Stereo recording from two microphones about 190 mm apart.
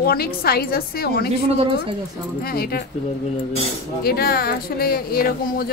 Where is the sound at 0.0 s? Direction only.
55° left (ahead or behind).